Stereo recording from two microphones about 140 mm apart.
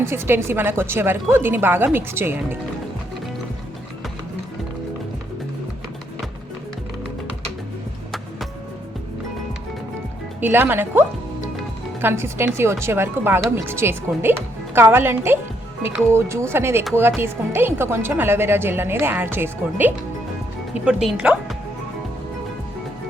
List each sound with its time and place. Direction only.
0.1 s a woman's voice: 15° right (ahead or behind)
10.4 s a woman's voice: 15° right (ahead or behind)
12.0 s a woman's voice: 15° right (ahead or behind)